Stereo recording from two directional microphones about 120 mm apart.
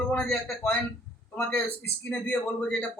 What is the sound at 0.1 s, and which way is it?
A man's voice, 10° left (ahead or behind).